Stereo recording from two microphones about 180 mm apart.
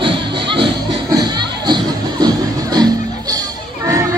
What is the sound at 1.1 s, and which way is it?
Music, 25° right (ahead or behind).